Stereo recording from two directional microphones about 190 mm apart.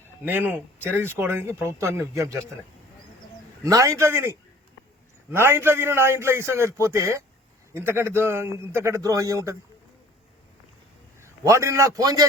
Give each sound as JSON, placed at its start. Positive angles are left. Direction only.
{"t": 0.3, "sound": "speech", "side_deg": -10}
{"t": 3.6, "sound": "speech", "side_deg": -15}
{"t": 11.2, "sound": "a man's voice", "side_deg": -15}